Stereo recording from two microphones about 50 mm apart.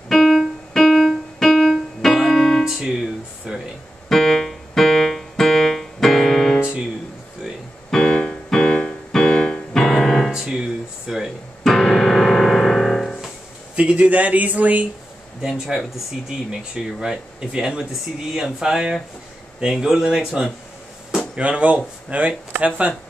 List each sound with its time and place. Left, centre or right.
0.1 s keyboard: centre
2.6 s music: centre
4.1 s keyboard: centre
7.9 s piano: centre
10.3 s drawer open or close: centre
11.6 s music: centre
13.7 s speech: right
15.4 s speech: centre
21.4 s speech: right